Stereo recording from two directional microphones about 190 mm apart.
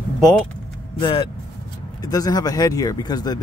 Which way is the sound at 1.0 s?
25° left (ahead or behind).